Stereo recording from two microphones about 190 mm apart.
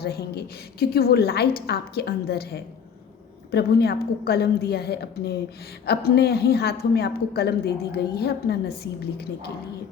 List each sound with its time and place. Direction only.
0.0 s a woman's voice: 55° left (ahead or behind)